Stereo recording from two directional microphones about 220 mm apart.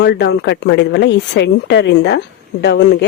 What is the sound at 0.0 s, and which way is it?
Speech, 50° left (ahead or behind).